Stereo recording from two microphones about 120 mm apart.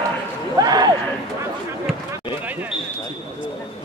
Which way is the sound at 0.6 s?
35° right (ahead or behind).